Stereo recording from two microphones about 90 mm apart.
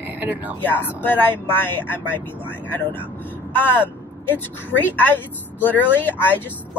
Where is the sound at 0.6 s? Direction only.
20° left (ahead or behind).